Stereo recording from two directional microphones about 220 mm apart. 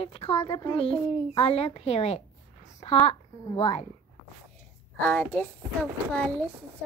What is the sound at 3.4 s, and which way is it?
Speech, 25° left (ahead or behind).